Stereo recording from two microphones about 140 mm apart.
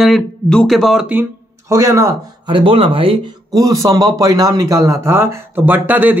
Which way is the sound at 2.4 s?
40° right (ahead or behind).